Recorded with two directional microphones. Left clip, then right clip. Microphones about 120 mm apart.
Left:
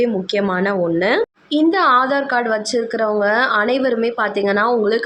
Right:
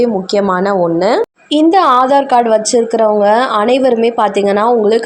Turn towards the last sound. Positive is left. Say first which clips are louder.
# right 6 dB
turn(degrees=-35)  # may be behind; listen again after turning